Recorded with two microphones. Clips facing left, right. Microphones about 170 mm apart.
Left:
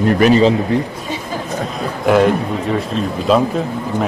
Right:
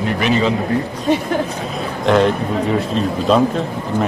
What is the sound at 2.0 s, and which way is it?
A man's voice, 5° left (ahead or behind).